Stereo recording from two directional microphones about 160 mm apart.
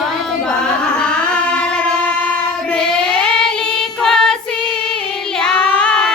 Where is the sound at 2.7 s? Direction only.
5° left (ahead or behind).